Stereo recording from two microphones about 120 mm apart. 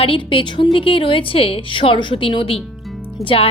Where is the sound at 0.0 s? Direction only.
45° left (ahead or behind).